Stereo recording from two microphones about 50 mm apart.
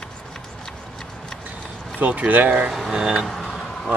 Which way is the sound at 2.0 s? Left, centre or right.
Right.